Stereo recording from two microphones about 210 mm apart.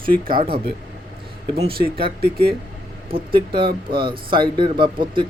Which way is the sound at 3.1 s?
25° right (ahead or behind).